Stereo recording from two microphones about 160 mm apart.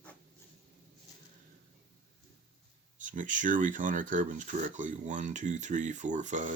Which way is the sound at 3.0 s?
55° right (ahead or behind).